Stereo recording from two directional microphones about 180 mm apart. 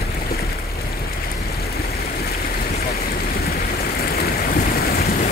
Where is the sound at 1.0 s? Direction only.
60° left (ahead or behind).